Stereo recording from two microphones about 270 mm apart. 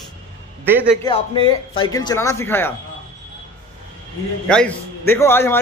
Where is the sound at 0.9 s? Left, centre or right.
Centre.